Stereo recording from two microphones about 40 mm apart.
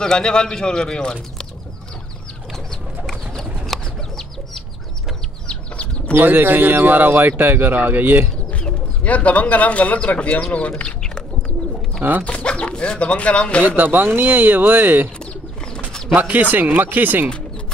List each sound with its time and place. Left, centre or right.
0.0 s a man's voice: centre
2.5 s bird: centre
3.6 s chicken: centre
5.5 s chicken: left
6.1 s speech: right
9.0 s speech: left
12.0 s speech: right
12.4 s speech: left
13.7 s speech: right
16.2 s speech: right